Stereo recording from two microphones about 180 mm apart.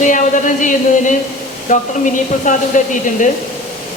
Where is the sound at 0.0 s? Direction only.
45° left (ahead or behind).